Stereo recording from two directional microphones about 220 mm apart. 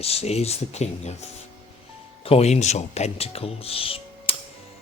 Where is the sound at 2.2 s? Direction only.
30° left (ahead or behind).